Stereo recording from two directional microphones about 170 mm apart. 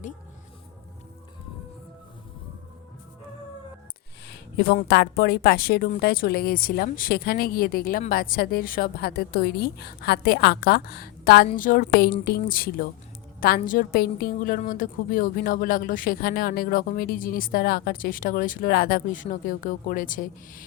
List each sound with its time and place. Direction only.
4.3 s a woman's voice: 80° left
11.5 s a woman's voice: 55° left (ahead or behind)